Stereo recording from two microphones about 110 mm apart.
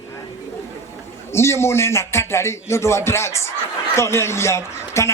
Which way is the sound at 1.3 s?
25° left (ahead or behind).